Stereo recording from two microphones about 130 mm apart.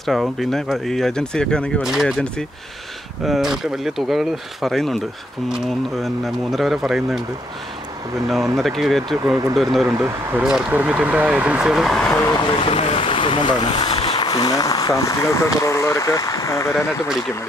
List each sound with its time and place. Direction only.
0.0 s speech: centre (ahead or behind)
8.5 s speech: centre (ahead or behind)
9.8 s speech: 20° right (ahead or behind)
10.4 s speech: 10° right (ahead or behind)
12.5 s speech: 45° left (ahead or behind)
13.7 s a sound: 45° left (ahead or behind)
14.2 s speech: 30° left (ahead or behind)